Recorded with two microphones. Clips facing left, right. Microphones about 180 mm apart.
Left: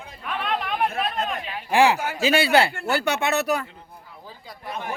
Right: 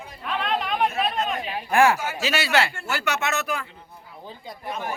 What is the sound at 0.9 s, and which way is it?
Chatter, 55° left (ahead or behind).